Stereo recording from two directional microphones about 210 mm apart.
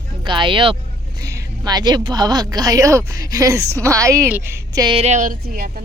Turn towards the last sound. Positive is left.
turn(degrees=-45)  # may be behind; listen again after turning